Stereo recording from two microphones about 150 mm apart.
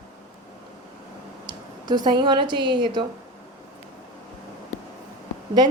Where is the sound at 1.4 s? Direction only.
30° right (ahead or behind).